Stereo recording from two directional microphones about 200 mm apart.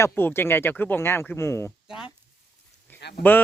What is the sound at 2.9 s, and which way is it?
Speech, 55° left (ahead or behind).